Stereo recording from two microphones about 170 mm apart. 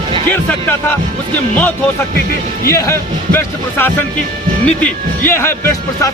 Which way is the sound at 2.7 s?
15° left (ahead or behind).